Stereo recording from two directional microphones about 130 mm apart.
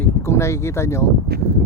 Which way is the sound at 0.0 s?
20° left (ahead or behind).